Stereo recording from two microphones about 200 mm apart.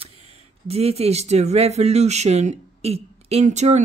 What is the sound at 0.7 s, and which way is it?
Speech, 30° right (ahead or behind).